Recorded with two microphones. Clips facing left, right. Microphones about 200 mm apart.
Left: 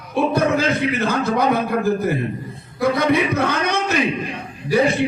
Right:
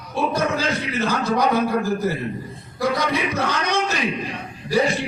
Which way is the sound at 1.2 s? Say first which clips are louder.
Right 2 dB; 55° left (ahead or behind).